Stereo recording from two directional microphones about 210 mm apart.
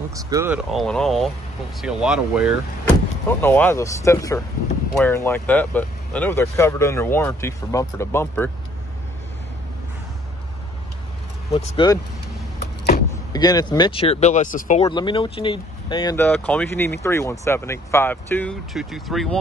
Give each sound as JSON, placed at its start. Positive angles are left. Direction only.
{"t": 0.1, "sound": "speech", "side_deg": -15}
{"t": 0.7, "sound": "speech", "side_deg": 0}
{"t": 2.8, "sound": "speech", "side_deg": 10}
{"t": 11.5, "sound": "speech", "side_deg": 25}
{"t": 12.9, "sound": "vehicle", "side_deg": 50}
{"t": 13.3, "sound": "speech", "side_deg": 20}
{"t": 14.9, "sound": "speech", "side_deg": 20}